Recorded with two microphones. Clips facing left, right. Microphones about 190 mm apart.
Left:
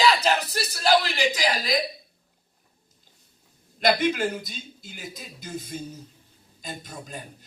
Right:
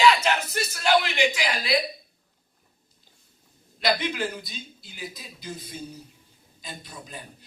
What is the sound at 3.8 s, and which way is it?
Speech, 45° left (ahead or behind).